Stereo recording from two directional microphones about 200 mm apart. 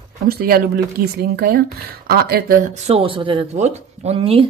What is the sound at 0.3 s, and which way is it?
Speech, 50° right (ahead or behind).